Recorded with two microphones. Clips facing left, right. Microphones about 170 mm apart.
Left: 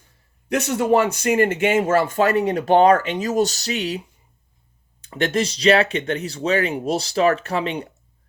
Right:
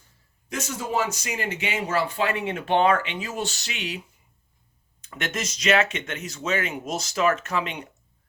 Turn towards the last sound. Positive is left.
turn(degrees=35)  # may be behind; listen again after turning